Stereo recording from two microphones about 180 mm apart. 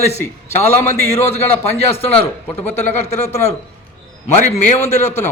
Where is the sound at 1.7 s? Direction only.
35° left (ahead or behind).